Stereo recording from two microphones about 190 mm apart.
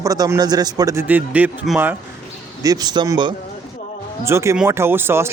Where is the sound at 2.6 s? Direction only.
20° right (ahead or behind).